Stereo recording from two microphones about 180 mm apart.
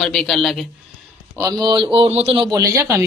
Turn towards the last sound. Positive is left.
turn(degrees=-15)  # may be behind; listen again after turning